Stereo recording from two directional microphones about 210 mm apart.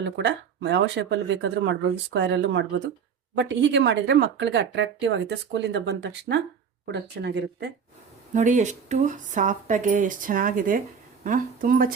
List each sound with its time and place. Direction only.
0.0 s speech: 55° right (ahead or behind)
8.3 s speech: 35° right (ahead or behind)